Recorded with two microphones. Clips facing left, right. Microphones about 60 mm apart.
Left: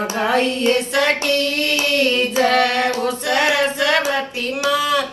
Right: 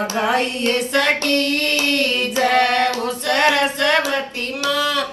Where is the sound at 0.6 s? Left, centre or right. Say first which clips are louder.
Left 1 dB; left.